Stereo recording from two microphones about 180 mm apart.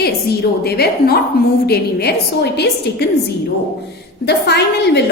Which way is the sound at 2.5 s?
65° left (ahead or behind).